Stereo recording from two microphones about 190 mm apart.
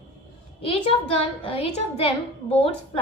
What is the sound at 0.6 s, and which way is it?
A woman's voice, 30° left (ahead or behind).